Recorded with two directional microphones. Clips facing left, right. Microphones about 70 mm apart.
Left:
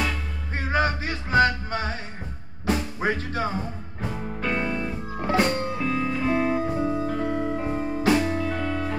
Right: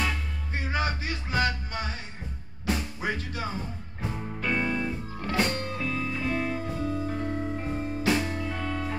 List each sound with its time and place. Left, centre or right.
0.7 s music: left
4.4 s music: centre
5.2 s music: left